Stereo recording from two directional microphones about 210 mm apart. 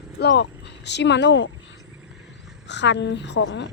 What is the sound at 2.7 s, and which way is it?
Speech, 55° left (ahead or behind).